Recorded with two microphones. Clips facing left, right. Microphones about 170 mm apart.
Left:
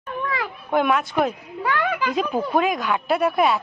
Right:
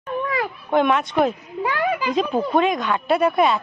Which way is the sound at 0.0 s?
25° right (ahead or behind).